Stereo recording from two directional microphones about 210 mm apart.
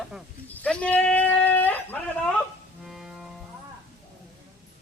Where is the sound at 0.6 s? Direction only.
5° left (ahead or behind).